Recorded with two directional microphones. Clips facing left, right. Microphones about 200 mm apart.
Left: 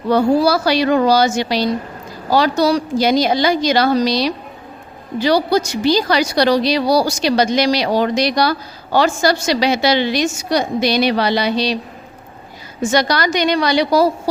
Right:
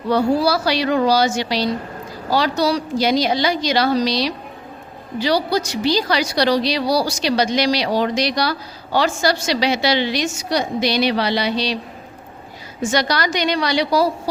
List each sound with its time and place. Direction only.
0.1 s a woman's voice: 50° left (ahead or behind)
12.9 s a woman's voice: 50° left (ahead or behind)